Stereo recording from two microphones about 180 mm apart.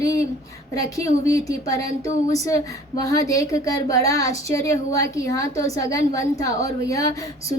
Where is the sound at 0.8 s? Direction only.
20° left (ahead or behind).